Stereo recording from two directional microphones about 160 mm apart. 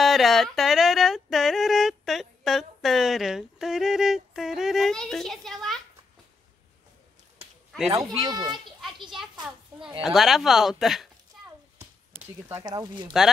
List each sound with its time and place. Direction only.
0.0 s a sound: centre (ahead or behind)
8.2 s speech: 25° right (ahead or behind)
10.0 s speech: centre (ahead or behind)
12.4 s speech: 20° right (ahead or behind)